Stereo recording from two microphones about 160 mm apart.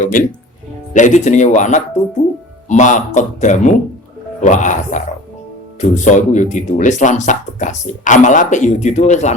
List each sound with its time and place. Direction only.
0.0 s speech: 55° left (ahead or behind)